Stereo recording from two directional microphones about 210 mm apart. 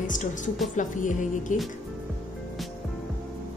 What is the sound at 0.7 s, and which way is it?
Music, 35° left (ahead or behind).